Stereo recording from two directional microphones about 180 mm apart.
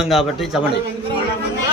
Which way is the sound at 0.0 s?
Centre (ahead or behind).